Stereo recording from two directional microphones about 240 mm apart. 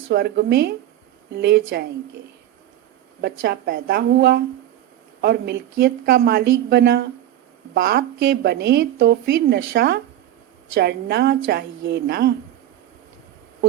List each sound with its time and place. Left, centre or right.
0.1 s speech: right
3.4 s a woman's voice: right